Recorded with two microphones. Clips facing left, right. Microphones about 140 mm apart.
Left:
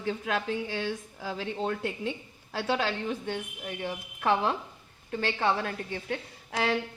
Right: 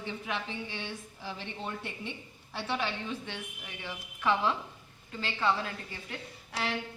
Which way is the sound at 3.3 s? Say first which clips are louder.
Left 8 dB; 45° left (ahead or behind).